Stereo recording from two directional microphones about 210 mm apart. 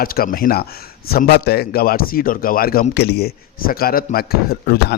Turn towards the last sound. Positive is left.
turn(degrees=45)  # may be behind; listen again after turning